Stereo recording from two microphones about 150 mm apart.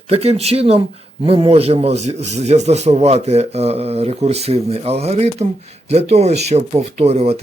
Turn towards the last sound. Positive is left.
turn(degrees=-45)  # may be behind; listen again after turning